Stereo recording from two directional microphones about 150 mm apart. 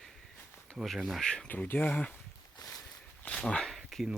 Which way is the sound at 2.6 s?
25° left (ahead or behind).